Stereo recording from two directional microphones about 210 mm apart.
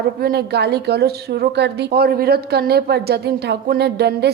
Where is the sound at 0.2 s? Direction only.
50° right (ahead or behind).